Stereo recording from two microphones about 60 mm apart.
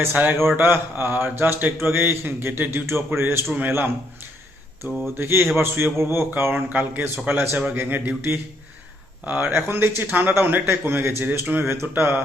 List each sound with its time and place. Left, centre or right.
0.4 s a man's voice: right
4.9 s speech: centre
5.1 s a man's voice: right
6.7 s a man's voice: right
9.5 s speech: right